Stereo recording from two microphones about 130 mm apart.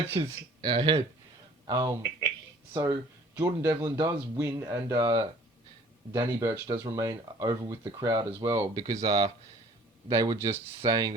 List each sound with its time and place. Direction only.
0.2 s speech: 40° right (ahead or behind); by 3.8 s 25° right (ahead or behind)
3.8 s speech: 35° right (ahead or behind)